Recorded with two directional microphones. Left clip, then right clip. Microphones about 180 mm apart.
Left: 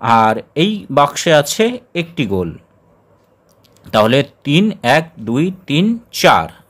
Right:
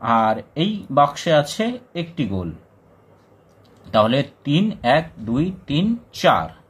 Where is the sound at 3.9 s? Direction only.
45° left (ahead or behind).